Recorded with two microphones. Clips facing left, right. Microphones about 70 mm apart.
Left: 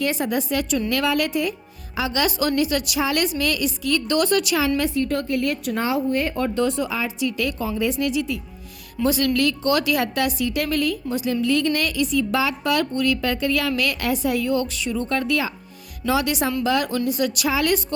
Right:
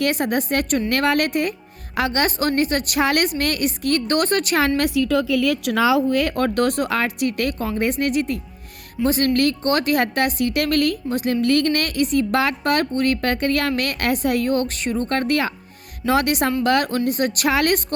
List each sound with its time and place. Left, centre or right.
0.0 s a woman's voice: right
4.8 s a woman's voice: right